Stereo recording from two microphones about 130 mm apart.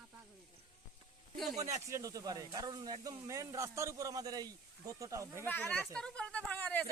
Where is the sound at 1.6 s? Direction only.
25° right (ahead or behind).